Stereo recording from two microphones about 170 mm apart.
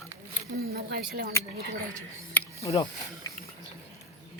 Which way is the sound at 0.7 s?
60° right (ahead or behind).